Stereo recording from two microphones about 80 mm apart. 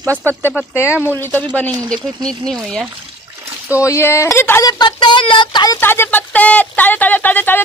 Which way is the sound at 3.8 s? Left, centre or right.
Left.